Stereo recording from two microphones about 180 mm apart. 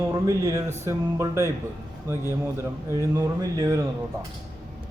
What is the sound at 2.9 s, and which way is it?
Speech, 15° right (ahead or behind).